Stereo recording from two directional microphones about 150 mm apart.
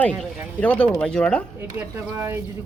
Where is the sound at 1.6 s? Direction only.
15° right (ahead or behind).